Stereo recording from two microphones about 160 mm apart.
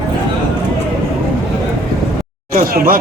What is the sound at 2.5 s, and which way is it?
Speech, 65° right (ahead or behind).